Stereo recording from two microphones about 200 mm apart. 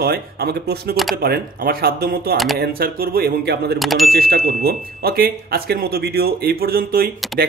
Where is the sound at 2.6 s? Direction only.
50° right (ahead or behind).